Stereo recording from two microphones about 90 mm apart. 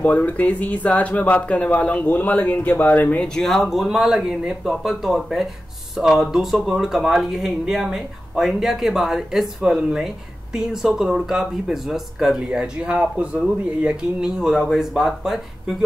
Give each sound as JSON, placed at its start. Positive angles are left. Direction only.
{"t": 0.0, "sound": "speech", "side_deg": 20}
{"t": 3.3, "sound": "speech", "side_deg": 5}